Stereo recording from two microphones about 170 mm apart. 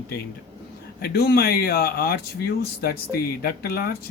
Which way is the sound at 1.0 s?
65° left (ahead or behind).